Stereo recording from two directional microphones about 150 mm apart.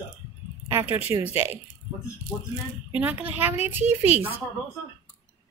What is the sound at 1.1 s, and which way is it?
Speech, 15° right (ahead or behind).